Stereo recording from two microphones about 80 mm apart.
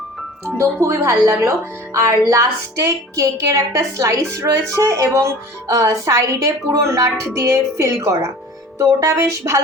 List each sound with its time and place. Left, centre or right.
0.8 s speech: right